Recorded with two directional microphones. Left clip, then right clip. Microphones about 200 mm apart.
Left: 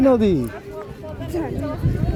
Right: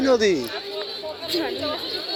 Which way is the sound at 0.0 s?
Centre (ahead or behind).